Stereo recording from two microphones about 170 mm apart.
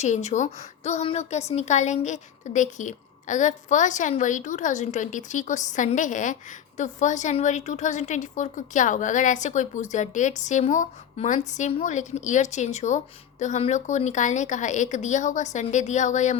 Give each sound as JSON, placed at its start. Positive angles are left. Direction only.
{"t": 0.0, "sound": "a woman's voice", "side_deg": 40}